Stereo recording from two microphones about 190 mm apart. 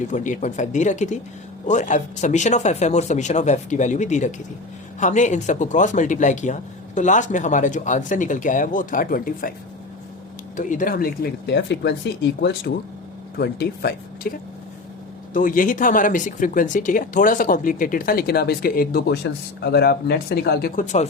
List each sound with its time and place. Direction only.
0.1 s speech: 40° left (ahead or behind)
10.6 s speech: 45° left (ahead or behind)
15.3 s speech: 45° left (ahead or behind)